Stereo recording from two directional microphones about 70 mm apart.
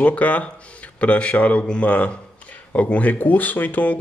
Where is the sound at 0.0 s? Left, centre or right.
Centre.